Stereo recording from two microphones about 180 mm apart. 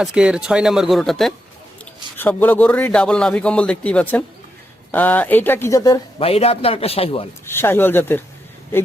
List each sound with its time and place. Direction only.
0.0 s speech: 5° right (ahead or behind); by 6.0 s 20° left (ahead or behind)
6.1 s a man's voice: 35° left (ahead or behind)
7.4 s speech: 15° left (ahead or behind)